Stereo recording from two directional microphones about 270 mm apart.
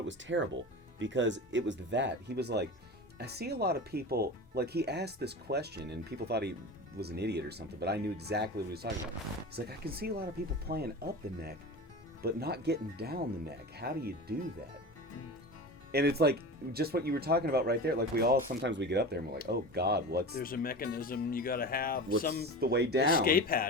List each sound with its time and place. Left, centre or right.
0.0 s speech: right
15.9 s speech: right
20.3 s speech: left
22.6 s speech: right
23.0 s speech: left